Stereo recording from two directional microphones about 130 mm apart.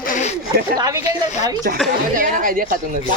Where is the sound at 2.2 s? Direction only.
90° right.